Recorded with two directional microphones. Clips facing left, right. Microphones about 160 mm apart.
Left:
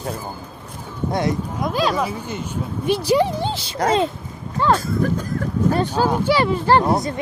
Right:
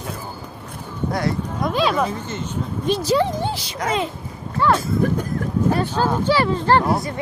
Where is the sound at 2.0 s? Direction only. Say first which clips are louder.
Right 1 dB; 10° left (ahead or behind).